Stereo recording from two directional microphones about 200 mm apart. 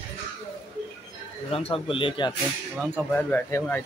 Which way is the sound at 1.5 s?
30° left (ahead or behind).